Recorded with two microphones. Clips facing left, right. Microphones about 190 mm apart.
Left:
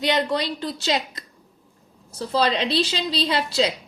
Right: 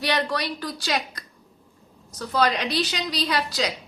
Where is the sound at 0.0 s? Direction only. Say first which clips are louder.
Left 3 dB; 20° left (ahead or behind).